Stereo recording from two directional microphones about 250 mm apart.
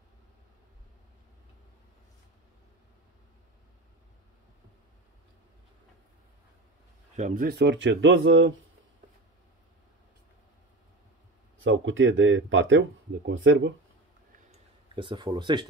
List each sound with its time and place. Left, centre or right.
7.2 s speech: right
11.5 s speech: right
15.0 s speech: centre